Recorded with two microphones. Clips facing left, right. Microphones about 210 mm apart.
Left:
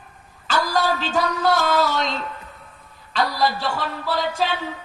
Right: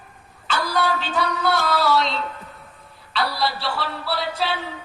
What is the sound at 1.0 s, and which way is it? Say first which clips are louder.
Music: left 2 dB; 45° left (ahead or behind).